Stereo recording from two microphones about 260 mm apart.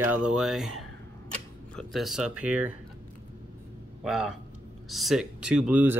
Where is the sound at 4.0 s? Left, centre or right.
Centre.